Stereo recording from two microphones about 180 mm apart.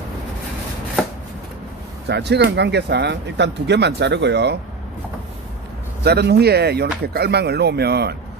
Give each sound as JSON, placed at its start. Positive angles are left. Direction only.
{"t": 2.0, "sound": "speech", "side_deg": -70}
{"t": 6.0, "sound": "speech", "side_deg": -65}